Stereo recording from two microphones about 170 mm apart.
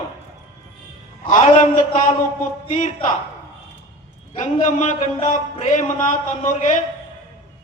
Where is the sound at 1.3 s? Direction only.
45° left (ahead or behind).